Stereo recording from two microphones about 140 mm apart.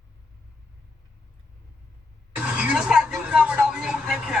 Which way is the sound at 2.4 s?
10° right (ahead or behind).